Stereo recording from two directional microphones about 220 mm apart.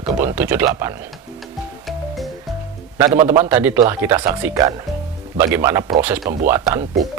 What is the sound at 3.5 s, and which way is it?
Speech, 10° right (ahead or behind).